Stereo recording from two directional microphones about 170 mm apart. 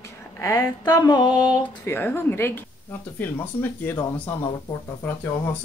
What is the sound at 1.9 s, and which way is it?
Speech, 15° left (ahead or behind).